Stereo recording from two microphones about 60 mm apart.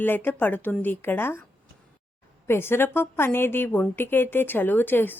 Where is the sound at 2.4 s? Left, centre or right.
Left.